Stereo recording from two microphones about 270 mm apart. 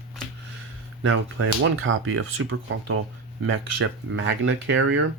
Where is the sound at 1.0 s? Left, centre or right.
Right.